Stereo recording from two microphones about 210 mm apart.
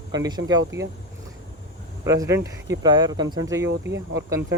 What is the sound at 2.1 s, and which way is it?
Speech, 15° right (ahead or behind).